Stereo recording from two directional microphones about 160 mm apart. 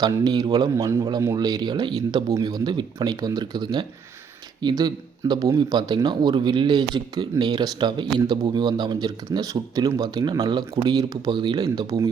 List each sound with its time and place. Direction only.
0.0 s speech: 25° right (ahead or behind)